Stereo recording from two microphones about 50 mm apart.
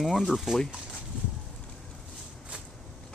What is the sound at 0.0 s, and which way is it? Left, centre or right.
Speech, centre.